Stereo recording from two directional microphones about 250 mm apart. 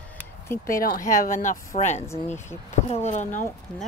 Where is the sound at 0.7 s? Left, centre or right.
Left.